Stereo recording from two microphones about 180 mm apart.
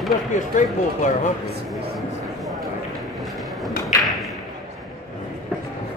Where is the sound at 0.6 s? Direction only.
45° left (ahead or behind).